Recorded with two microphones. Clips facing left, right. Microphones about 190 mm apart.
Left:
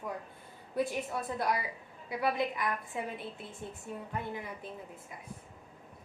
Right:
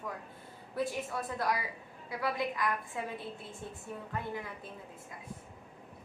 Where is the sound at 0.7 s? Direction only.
20° left (ahead or behind).